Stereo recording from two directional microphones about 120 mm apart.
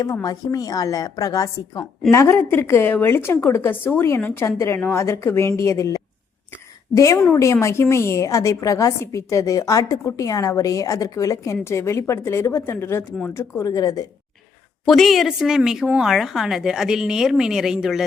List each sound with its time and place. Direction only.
0.0 s a woman's voice: 30° left (ahead or behind)
14.8 s a woman's voice: centre (ahead or behind)